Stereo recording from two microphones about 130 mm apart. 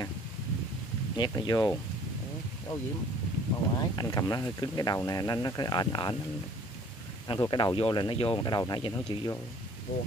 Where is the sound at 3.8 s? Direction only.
30° left (ahead or behind).